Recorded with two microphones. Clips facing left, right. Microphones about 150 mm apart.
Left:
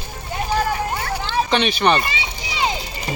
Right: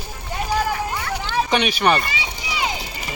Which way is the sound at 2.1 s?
25° left (ahead or behind).